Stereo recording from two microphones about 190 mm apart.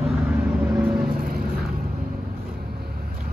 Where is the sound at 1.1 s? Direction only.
50° right (ahead or behind).